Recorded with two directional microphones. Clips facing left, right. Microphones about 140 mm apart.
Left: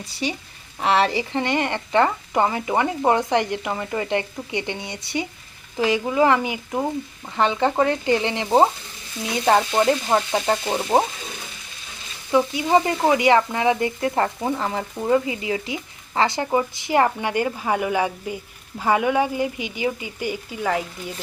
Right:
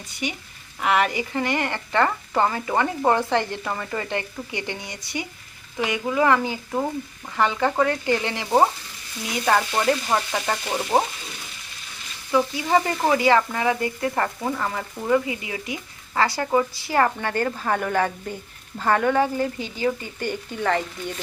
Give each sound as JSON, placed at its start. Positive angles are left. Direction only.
{"t": 0.1, "sound": "speech", "side_deg": 35}
{"t": 12.3, "sound": "speech", "side_deg": 20}